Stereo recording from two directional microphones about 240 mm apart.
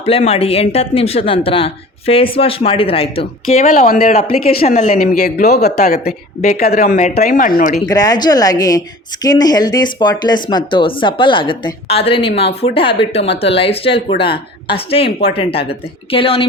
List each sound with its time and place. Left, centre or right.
0.0 s speech: left
5.5 s speech: left
7.9 s a woman's voice: centre